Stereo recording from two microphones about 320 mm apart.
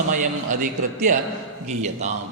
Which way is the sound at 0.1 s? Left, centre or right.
Right.